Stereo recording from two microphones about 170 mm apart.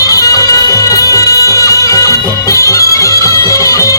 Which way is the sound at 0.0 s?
20° left (ahead or behind).